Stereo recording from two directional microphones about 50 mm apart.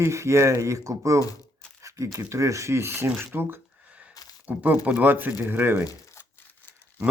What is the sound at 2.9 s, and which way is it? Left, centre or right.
Speech, right.